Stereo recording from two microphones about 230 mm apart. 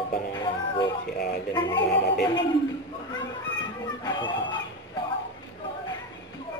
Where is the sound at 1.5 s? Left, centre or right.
Centre.